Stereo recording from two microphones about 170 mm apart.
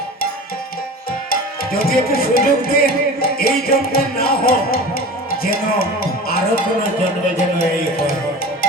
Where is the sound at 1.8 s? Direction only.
60° left (ahead or behind).